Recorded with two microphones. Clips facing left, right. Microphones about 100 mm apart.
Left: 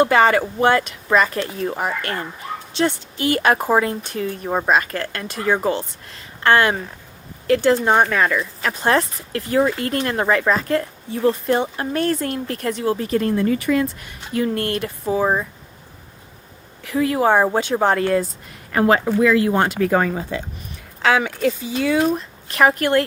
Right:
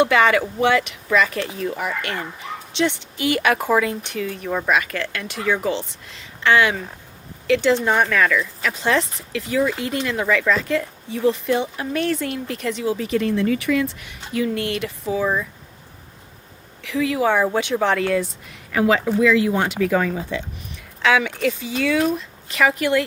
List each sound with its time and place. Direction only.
0.0 s speech: 40° left (ahead or behind)
8.4 s speech: 45° left (ahead or behind)
16.8 s speech: 45° left (ahead or behind)